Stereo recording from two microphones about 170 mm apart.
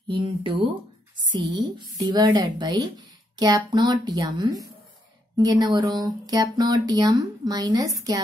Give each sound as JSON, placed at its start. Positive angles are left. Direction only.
{"t": 0.1, "sound": "speech", "side_deg": -30}